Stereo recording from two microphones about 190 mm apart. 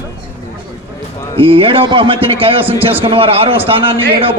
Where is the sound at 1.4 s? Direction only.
30° right (ahead or behind).